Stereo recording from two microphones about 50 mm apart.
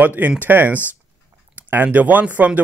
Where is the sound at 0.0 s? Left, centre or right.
Right.